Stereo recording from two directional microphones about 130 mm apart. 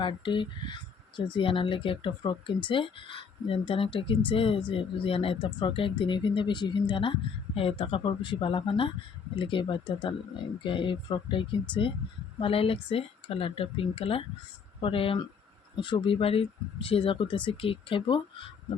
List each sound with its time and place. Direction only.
0.0 s speech: 40° left (ahead or behind)